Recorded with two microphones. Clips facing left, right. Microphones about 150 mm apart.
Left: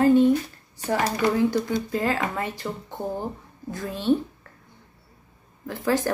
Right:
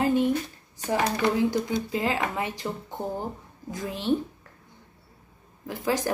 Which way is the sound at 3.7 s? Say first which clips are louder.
Left 1 dB; 20° right (ahead or behind).